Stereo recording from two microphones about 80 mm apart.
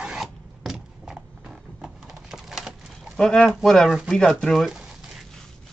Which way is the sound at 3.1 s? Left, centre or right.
Centre.